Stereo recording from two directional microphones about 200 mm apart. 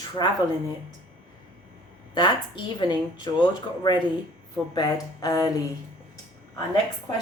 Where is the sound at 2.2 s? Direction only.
20° left (ahead or behind).